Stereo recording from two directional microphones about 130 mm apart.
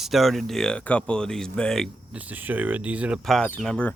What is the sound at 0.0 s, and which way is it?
Speech, centre (ahead or behind).